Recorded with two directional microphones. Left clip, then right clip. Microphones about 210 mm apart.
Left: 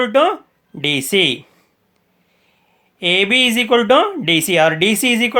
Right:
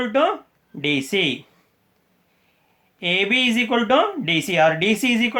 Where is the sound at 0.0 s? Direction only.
45° left (ahead or behind).